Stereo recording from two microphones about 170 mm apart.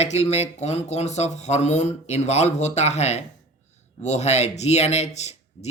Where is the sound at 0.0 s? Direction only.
40° left (ahead or behind).